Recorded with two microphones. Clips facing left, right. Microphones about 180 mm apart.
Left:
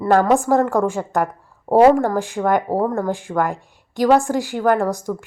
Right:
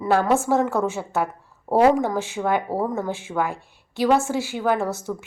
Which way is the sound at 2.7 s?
40° left (ahead or behind).